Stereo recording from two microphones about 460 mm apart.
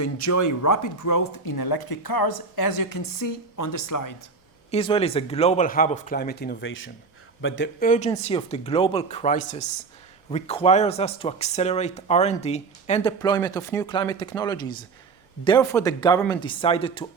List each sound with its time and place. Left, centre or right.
0.0 s speech: left
4.7 s speech: centre